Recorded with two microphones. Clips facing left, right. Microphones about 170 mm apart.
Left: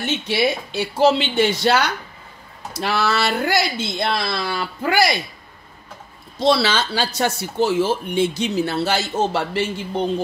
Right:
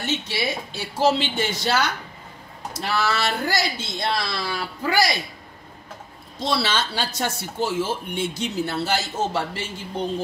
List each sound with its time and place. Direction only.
0.3 s speech: 65° left (ahead or behind)
6.4 s speech: 80° left